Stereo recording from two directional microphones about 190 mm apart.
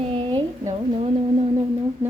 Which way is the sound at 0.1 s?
25° right (ahead or behind).